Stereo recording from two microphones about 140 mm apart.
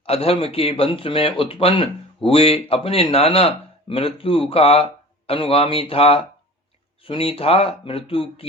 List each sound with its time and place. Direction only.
0.0 s speech: 45° left (ahead or behind)